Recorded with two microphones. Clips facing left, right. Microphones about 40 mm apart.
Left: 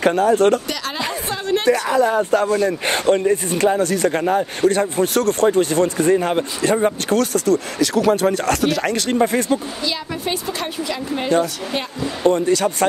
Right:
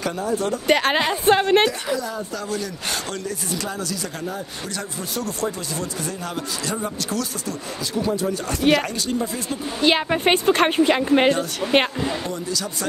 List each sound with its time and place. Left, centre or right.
0.0 s speech: left
0.7 s a woman's voice: right
1.7 s speech: left
7.9 s speech: left
8.3 s speech: left
9.8 s a woman's voice: right
12.2 s speech: left